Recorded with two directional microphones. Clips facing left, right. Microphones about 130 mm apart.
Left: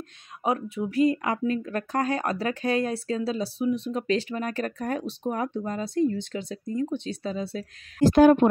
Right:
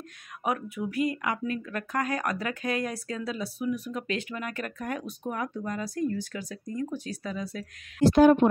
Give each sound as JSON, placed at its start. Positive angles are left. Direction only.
{"t": 0.4, "sound": "speech", "side_deg": 25}
{"t": 8.0, "sound": "speech", "side_deg": 50}